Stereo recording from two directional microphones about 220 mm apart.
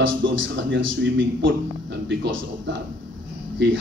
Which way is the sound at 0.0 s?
55° right (ahead or behind).